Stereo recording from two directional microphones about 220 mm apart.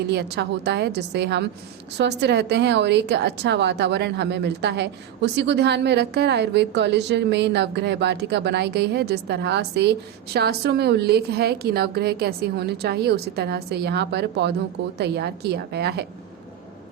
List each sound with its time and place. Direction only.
0.1 s a woman's voice: 50° right (ahead or behind)